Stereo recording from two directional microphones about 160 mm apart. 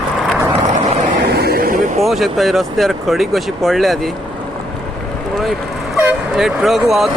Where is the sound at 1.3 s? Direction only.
75° right (ahead or behind).